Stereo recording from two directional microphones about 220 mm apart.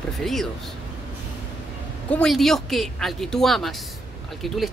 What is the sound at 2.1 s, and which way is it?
Speech, 5° left (ahead or behind).